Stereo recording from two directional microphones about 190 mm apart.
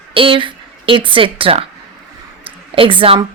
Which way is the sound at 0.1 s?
25° right (ahead or behind).